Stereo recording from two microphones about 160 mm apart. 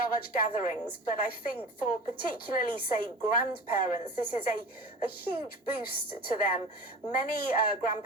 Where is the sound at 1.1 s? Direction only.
65° left (ahead or behind).